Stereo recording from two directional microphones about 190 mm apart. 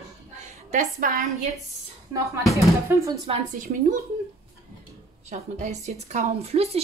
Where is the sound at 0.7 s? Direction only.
45° right (ahead or behind).